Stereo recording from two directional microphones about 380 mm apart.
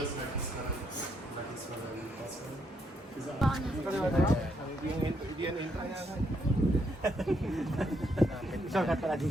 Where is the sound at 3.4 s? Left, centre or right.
Centre.